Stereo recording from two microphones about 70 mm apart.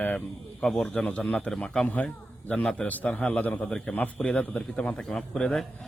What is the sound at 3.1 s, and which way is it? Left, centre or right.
Speech, centre.